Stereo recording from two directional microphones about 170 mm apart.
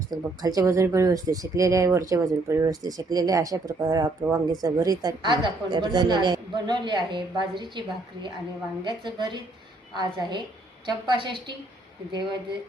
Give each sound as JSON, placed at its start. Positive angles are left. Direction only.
{"t": 0.1, "sound": "speech", "side_deg": -20}